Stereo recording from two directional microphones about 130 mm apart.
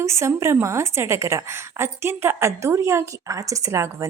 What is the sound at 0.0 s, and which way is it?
A woman's voice, 20° right (ahead or behind).